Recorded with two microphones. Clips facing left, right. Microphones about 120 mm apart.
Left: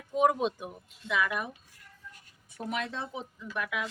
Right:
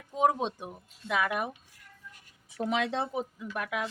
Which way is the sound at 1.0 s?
50° right (ahead or behind).